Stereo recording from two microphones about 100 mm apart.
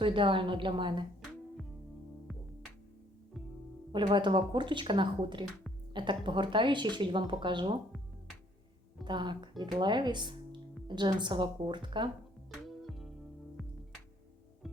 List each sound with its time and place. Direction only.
0.0 s a woman's voice: 55° right (ahead or behind)
3.9 s speech: 50° right (ahead or behind)
9.0 s speech: 50° right (ahead or behind)
12.6 s music: centre (ahead or behind)